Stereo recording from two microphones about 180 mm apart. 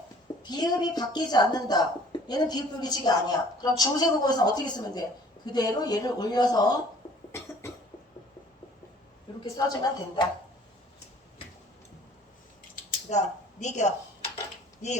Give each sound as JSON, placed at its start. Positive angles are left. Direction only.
{"t": 0.4, "sound": "a woman's voice", "side_deg": 20}
{"t": 9.4, "sound": "a woman's voice", "side_deg": 20}
{"t": 13.1, "sound": "a sound", "side_deg": 40}